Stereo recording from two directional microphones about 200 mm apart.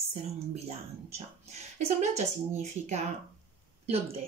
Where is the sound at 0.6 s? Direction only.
35° right (ahead or behind).